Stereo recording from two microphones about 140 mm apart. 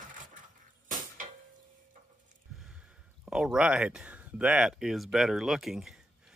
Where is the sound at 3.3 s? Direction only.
5° right (ahead or behind).